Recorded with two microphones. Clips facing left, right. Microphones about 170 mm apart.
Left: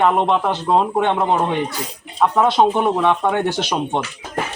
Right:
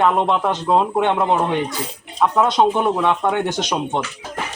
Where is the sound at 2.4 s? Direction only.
5° left (ahead or behind).